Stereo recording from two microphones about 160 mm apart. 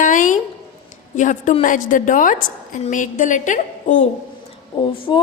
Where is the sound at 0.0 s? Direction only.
55° left (ahead or behind).